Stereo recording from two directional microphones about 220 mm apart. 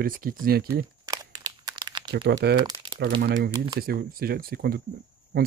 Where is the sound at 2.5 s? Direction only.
20° right (ahead or behind).